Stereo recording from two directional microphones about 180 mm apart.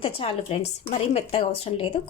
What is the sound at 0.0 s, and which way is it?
Speech, 30° left (ahead or behind).